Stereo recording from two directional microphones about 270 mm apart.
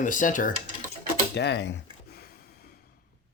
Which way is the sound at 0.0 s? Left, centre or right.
Left.